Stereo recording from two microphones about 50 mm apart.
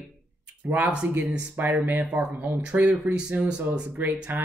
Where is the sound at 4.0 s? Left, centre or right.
Right.